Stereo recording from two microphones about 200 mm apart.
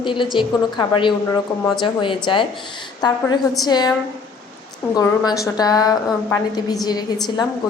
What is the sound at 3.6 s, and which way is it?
A woman's voice, 20° left (ahead or behind).